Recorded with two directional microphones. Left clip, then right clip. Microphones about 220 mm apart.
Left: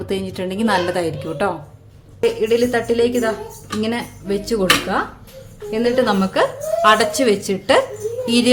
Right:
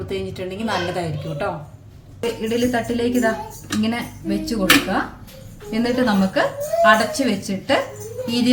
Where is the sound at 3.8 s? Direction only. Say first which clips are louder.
Left 3 dB; 50° left (ahead or behind).